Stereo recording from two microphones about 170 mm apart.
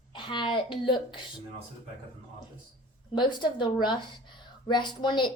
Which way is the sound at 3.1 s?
25° left (ahead or behind).